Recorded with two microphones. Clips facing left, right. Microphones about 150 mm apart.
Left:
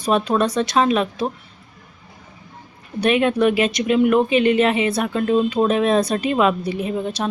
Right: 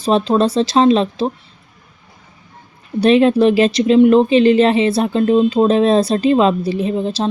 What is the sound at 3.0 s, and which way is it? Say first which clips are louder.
Speech: right 6 dB; 30° right (ahead or behind).